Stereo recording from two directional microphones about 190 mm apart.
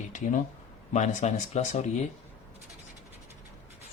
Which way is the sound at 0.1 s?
40° left (ahead or behind).